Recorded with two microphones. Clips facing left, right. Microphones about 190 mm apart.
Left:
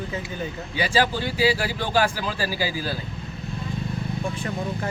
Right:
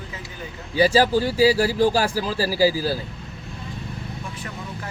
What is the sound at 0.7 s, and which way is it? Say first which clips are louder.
Speech: right 6 dB; 40° right (ahead or behind).